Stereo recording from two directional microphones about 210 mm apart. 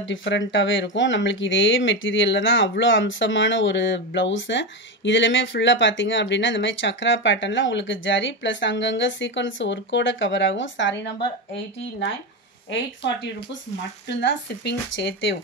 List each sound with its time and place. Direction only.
0.0 s speech: 60° left (ahead or behind)
14.0 s speech: 55° left (ahead or behind)